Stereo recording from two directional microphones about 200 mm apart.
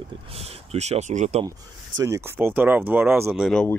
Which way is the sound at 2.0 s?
15° right (ahead or behind).